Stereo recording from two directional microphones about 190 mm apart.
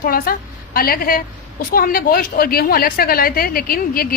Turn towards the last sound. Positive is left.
turn(degrees=50)  # may be behind; listen again after turning